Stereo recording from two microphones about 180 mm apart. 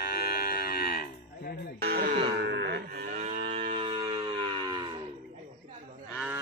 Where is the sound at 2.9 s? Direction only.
45° right (ahead or behind); by 4.8 s 25° right (ahead or behind).